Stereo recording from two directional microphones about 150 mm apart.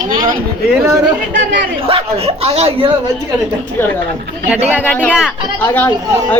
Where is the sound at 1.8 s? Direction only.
40° right (ahead or behind).